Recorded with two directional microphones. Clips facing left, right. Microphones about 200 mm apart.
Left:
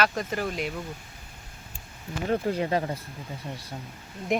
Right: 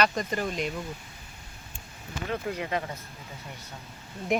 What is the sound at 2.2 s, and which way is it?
Speech, 35° left (ahead or behind).